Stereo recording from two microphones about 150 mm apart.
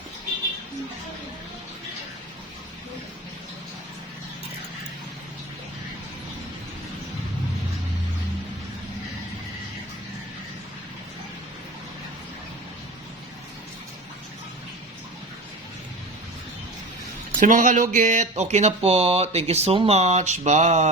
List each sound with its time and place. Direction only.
17.4 s speech: 60° right (ahead or behind)